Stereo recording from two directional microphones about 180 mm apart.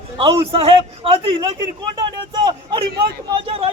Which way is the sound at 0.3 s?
30° right (ahead or behind).